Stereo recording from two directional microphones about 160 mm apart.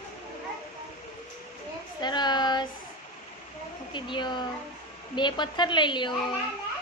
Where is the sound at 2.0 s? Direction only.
25° left (ahead or behind).